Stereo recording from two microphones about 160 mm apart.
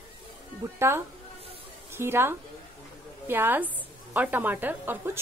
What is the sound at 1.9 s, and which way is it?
A woman's voice, 15° right (ahead or behind).